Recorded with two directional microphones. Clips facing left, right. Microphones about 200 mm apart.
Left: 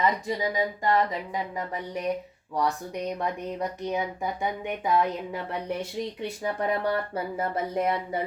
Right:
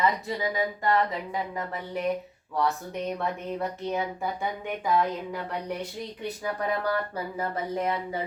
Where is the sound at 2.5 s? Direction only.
15° left (ahead or behind).